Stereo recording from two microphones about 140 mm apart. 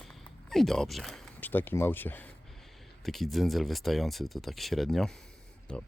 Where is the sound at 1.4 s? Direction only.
15° left (ahead or behind).